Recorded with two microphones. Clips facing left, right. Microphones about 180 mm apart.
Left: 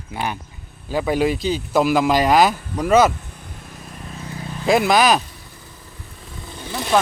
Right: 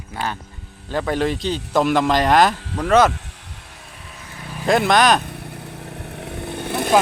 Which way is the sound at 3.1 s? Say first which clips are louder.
Even; 85° right.